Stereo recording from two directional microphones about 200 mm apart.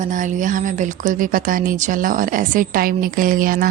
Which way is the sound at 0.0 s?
40° right (ahead or behind).